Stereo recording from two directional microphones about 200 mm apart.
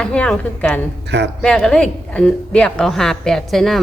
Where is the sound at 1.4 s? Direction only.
5° left (ahead or behind).